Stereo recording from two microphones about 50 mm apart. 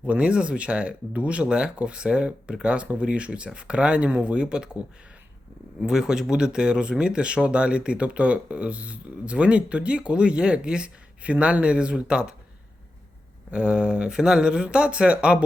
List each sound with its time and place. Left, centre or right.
0.1 s speech: right
5.8 s speech: centre
13.5 s speech: right